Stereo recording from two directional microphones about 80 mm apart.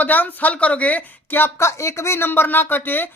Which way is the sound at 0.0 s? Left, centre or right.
Left.